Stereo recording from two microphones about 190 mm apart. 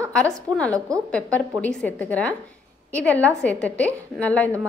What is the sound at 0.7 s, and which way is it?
Speech, 15° right (ahead or behind).